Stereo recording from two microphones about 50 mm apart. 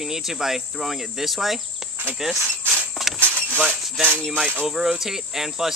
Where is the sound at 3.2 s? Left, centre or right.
Right.